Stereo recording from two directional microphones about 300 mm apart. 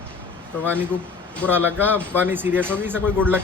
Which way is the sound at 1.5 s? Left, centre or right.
Centre.